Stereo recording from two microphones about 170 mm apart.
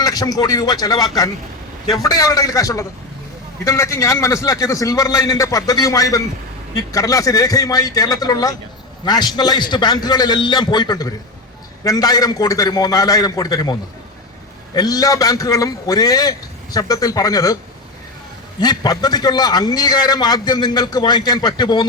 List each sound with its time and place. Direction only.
0.0 s a man's voice: 20° left (ahead or behind)
14.8 s a man's voice: 20° left (ahead or behind)
18.6 s a man's voice: 25° left (ahead or behind)